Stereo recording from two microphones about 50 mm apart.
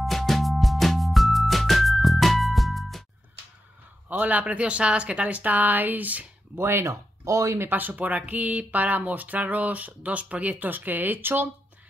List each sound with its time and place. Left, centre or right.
0.0 s music: centre
4.1 s speech: right
6.5 s speech: right
7.6 s speech: right